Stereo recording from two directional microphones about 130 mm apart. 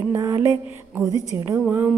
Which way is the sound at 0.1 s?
20° right (ahead or behind).